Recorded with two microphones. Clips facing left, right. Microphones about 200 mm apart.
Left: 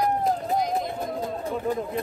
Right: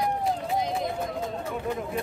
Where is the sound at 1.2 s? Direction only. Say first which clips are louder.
Left 3 dB; 35° left (ahead or behind).